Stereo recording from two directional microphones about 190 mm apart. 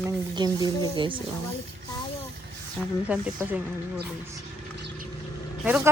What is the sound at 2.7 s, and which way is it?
Speech, 5° right (ahead or behind).